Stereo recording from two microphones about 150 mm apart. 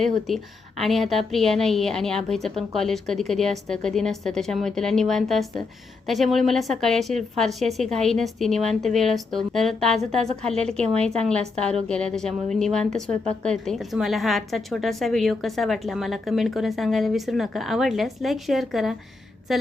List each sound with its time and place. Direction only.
0.8 s a woman's voice: centre (ahead or behind)